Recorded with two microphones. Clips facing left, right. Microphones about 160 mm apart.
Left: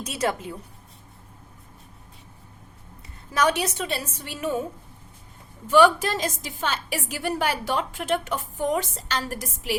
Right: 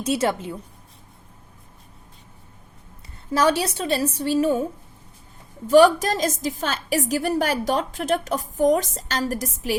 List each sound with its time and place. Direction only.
0.0 s a woman's voice: 30° right (ahead or behind)
3.3 s a woman's voice: 30° right (ahead or behind)
5.6 s a woman's voice: 40° right (ahead or behind)